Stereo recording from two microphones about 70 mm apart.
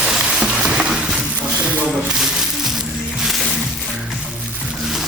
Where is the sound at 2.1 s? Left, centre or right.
Centre.